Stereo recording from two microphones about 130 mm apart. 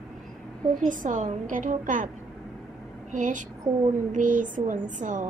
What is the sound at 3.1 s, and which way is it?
Speech, 75° right (ahead or behind).